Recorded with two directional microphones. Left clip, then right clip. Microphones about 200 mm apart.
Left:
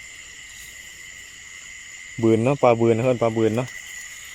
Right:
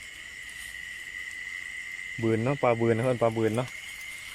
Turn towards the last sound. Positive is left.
turn(degrees=5)  # may be behind; listen again after turning